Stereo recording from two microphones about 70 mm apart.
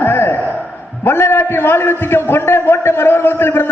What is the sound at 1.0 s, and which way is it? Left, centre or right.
A man's voice, left.